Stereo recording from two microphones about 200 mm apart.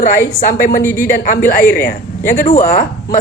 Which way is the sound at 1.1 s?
45° left (ahead or behind).